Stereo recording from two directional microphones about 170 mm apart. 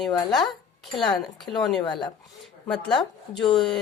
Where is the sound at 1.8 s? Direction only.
25° left (ahead or behind).